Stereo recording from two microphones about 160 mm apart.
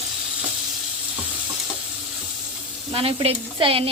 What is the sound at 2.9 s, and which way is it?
Speech, 35° right (ahead or behind).